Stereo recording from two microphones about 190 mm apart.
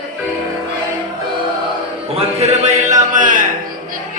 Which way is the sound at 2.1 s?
35° right (ahead or behind).